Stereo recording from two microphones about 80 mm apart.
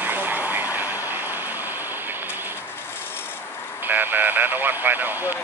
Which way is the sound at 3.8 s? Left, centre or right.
Right.